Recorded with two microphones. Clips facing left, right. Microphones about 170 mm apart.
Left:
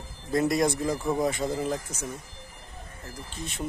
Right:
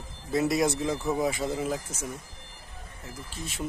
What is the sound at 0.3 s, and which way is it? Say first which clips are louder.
Speech: left 1 dB; 5° right (ahead or behind).